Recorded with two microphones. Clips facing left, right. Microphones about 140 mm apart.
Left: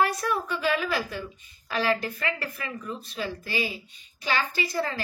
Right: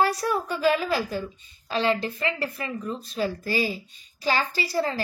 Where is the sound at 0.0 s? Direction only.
35° right (ahead or behind).